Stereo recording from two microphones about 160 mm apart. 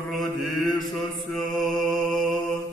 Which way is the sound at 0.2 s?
Centre (ahead or behind).